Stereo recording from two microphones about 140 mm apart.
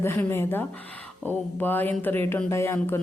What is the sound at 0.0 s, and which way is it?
Speech, 15° left (ahead or behind).